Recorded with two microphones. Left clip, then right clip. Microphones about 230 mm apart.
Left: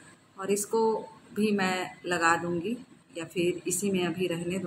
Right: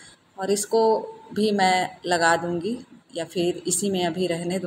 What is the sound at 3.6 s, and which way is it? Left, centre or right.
Speech, centre.